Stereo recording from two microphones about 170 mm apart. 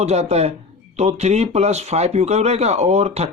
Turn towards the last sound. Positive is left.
turn(degrees=-40)  # may be behind; listen again after turning